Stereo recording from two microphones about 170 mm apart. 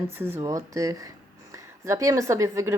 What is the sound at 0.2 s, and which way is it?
A woman's voice, 15° right (ahead or behind).